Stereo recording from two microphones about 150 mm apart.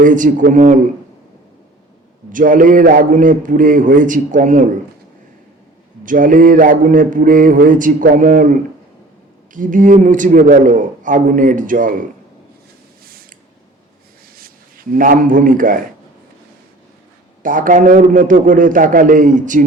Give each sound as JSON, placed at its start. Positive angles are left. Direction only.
{"t": 0.0, "sound": "mantra", "side_deg": -60}
{"t": 2.3, "sound": "mantra", "side_deg": -65}
{"t": 6.1, "sound": "mantra", "side_deg": -65}
{"t": 14.3, "sound": "speech", "side_deg": -75}
{"t": 17.4, "sound": "mantra", "side_deg": -65}